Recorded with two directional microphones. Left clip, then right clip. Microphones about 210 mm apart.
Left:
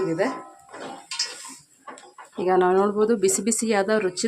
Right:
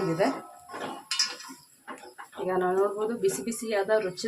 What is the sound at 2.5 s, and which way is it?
Speech, 55° left (ahead or behind).